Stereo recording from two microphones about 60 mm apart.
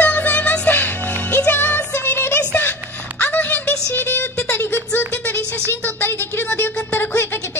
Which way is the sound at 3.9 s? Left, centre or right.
Left.